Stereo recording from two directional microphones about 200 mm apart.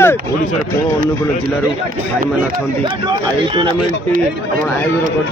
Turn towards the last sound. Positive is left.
turn(degrees=-25)  # may be behind; listen again after turning